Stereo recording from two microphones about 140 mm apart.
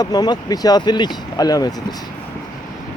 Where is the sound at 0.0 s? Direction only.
30° left (ahead or behind).